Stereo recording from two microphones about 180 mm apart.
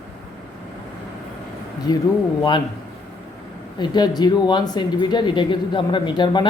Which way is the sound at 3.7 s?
25° left (ahead or behind).